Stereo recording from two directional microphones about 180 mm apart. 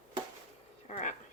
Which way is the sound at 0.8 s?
40° left (ahead or behind).